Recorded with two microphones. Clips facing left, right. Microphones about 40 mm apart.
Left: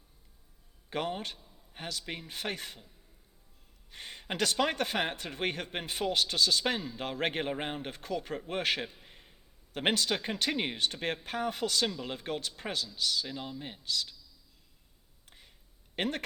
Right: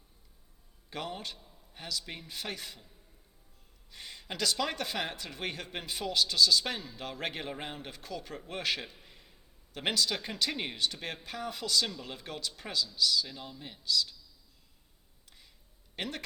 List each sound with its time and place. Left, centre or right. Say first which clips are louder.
0.9 s speech: left 4 dB; left
3.9 s speech: left 4 dB; left
9.0 s a sound: left 1 dB; left
10.2 s speech: left 3 dB; left
15.3 s a sound: left 2 dB; left
16.0 s speech: left 5 dB; left